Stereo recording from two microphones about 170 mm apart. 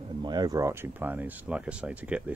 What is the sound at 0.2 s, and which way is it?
Speech, 25° right (ahead or behind).